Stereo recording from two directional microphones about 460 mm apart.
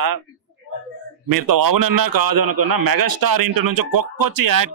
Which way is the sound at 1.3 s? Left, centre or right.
Right.